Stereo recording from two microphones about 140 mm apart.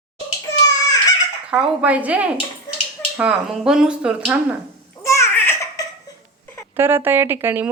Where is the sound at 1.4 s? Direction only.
10° right (ahead or behind).